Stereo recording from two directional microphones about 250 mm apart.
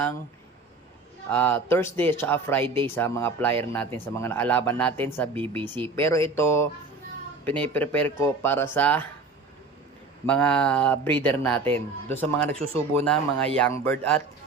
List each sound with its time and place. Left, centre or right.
1.3 s speech: centre
10.2 s speech: centre
12.5 s speech: right
13.1 s speech: centre